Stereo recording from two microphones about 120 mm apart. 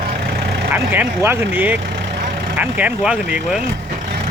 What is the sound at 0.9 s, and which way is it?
Speech, 20° right (ahead or behind).